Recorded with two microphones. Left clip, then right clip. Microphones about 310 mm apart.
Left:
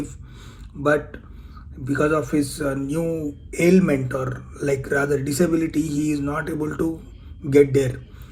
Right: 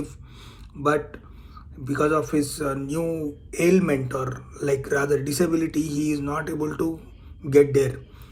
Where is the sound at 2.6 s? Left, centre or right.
Left.